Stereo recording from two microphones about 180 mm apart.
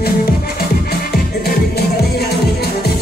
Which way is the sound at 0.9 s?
55° left (ahead or behind).